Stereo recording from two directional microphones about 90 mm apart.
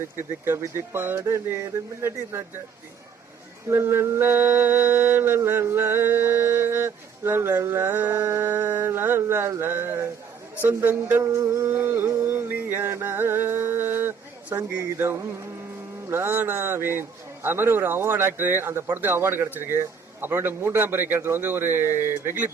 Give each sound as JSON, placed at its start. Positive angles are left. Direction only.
{"t": 0.2, "sound": "mantra", "side_deg": -25}
{"t": 3.7, "sound": "mantra", "side_deg": -30}
{"t": 11.2, "sound": "a sound", "side_deg": -35}
{"t": 16.0, "sound": "mantra", "side_deg": -25}